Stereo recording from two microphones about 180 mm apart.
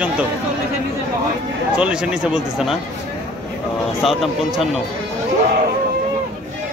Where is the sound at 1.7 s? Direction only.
5° right (ahead or behind).